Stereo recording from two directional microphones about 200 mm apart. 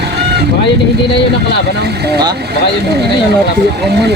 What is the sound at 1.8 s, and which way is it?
Speech, 55° right (ahead or behind).